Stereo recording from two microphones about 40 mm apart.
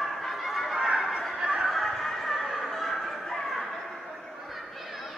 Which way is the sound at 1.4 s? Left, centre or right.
Centre.